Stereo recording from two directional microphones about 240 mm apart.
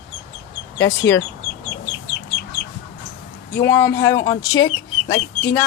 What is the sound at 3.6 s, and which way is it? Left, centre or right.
Speech, centre.